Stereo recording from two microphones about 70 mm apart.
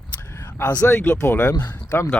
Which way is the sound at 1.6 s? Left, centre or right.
Left.